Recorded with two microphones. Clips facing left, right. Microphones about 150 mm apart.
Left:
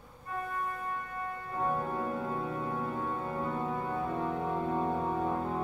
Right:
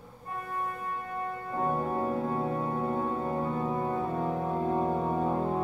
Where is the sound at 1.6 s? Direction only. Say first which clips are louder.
Right 3 dB; 30° right (ahead or behind).